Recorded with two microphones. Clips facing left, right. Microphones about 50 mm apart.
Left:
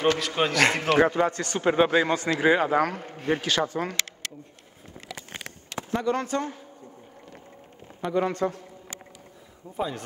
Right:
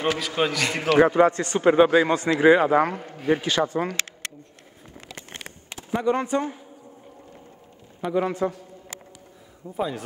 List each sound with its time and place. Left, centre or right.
0.0 s a man's voice: centre
1.1 s speech: right
1.6 s a man's voice: centre
3.4 s speech: right
5.9 s speech: centre
8.0 s speech: centre
9.8 s a man's voice: centre